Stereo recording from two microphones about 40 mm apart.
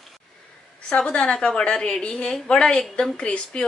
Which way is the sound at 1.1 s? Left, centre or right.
Left.